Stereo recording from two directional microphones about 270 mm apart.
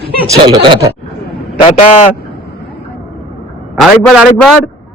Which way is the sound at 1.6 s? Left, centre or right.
Left.